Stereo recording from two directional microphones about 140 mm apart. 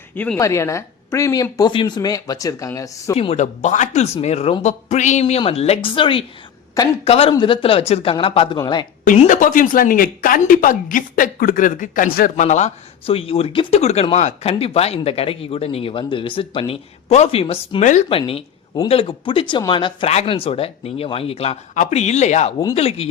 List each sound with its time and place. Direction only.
0.3 s speech: 20° left (ahead or behind)
3.2 s speech: 50° left (ahead or behind)
5.2 s speech: 45° left (ahead or behind)
8.5 s speech: 30° left (ahead or behind)
9.1 s speech: 65° left (ahead or behind); by 23.0 s 45° left (ahead or behind)